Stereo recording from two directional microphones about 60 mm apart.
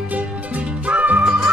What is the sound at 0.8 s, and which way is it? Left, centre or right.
Music, right.